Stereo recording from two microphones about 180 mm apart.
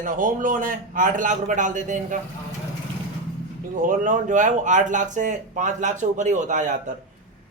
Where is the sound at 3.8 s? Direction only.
45° right (ahead or behind).